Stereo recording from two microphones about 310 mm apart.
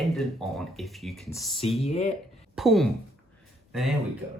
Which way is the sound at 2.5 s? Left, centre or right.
Centre.